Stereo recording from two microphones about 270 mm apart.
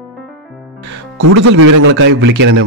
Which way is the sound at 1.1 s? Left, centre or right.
Right.